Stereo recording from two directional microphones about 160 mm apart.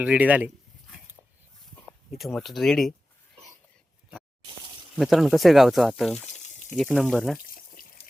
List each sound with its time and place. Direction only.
0.0 s speech: 10° right (ahead or behind)
1.9 s speech: centre (ahead or behind)
4.9 s speech: centre (ahead or behind)
6.3 s water: 45° left (ahead or behind)
6.7 s speech: 5° left (ahead or behind)
7.5 s a sound: 65° left (ahead or behind)